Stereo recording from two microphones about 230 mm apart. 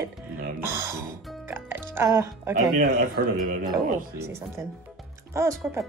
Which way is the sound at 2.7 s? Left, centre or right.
Right.